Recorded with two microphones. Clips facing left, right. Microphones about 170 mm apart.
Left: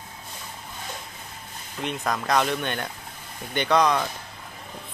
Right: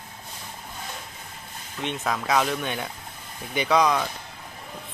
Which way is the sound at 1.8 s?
Centre (ahead or behind).